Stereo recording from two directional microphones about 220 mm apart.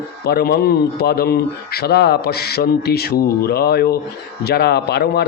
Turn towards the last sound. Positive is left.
turn(degrees=45)  # may be behind; listen again after turning